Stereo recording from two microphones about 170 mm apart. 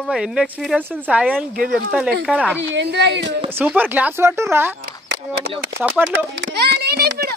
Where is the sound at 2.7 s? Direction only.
90° right.